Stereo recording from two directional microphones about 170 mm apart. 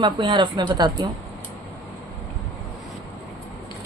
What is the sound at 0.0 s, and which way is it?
Speech, 30° right (ahead or behind).